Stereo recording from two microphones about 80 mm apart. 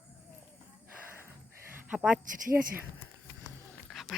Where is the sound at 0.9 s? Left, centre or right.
Right.